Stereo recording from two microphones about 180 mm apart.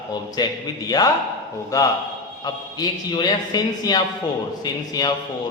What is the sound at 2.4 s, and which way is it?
A man's voice, 25° left (ahead or behind).